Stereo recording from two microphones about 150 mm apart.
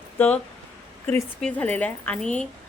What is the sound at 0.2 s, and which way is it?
A woman's voice, 5° left (ahead or behind).